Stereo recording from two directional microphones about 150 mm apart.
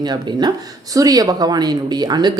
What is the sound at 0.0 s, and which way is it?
A woman's voice, 30° right (ahead or behind).